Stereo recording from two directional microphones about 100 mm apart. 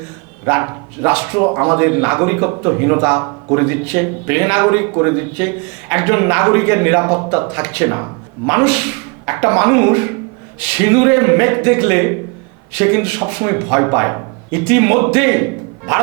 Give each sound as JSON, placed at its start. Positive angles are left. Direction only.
{"t": 0.4, "sound": "speech", "side_deg": -20}